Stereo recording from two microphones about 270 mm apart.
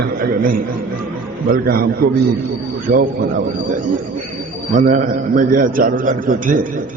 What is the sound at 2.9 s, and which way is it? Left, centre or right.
Speech, right.